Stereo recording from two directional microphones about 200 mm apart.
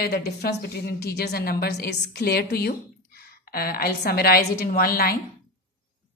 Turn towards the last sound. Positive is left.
turn(degrees=50)  # may be behind; listen again after turning